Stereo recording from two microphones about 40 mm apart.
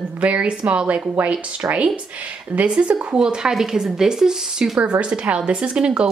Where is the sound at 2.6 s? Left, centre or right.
Right; by 4.8 s centre.